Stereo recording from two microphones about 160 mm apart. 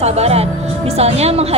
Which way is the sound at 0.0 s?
40° right (ahead or behind).